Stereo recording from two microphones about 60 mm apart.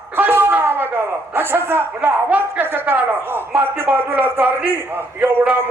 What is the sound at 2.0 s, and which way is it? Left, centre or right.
Speech, right.